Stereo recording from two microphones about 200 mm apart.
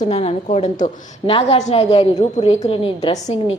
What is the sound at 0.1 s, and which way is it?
A woman's voice, 30° left (ahead or behind).